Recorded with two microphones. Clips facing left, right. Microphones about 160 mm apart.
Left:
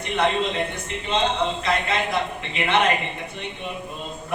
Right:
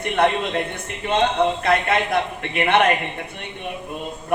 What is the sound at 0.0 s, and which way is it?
A man's voice, 55° right (ahead or behind).